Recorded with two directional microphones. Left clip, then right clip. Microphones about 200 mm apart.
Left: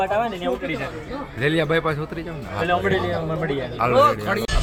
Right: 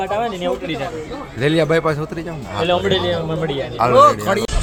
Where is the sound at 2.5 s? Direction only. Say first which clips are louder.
Right 4 dB; 10° right (ahead or behind).